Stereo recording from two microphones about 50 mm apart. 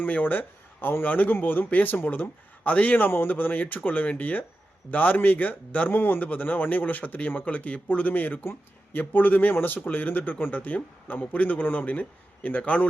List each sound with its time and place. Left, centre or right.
0.0 s speech: left
8.1 s speech: left